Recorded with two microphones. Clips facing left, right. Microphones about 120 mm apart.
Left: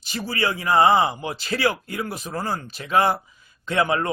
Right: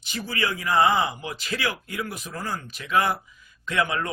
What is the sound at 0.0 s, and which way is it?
A man's voice, 35° left (ahead or behind).